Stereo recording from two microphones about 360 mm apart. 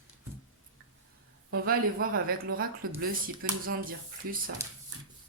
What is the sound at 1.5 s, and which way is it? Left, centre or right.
Speech, right.